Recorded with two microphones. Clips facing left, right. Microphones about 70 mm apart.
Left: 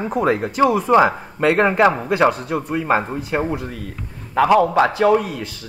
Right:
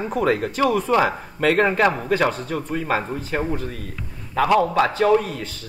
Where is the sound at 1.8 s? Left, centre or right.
Centre.